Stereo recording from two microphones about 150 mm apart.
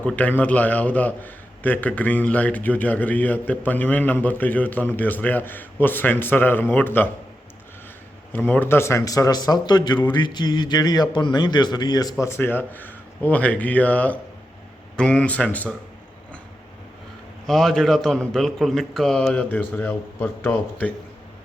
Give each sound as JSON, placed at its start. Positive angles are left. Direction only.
{"t": 0.0, "sound": "a man's voice", "side_deg": 10}
{"t": 8.3, "sound": "speech", "side_deg": 10}
{"t": 12.2, "sound": "a man's voice", "side_deg": 15}
{"t": 17.4, "sound": "a man's voice", "side_deg": 5}